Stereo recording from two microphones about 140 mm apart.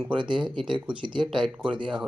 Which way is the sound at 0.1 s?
35° right (ahead or behind).